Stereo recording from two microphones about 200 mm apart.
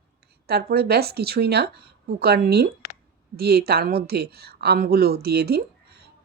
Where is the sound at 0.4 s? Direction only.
55° right (ahead or behind).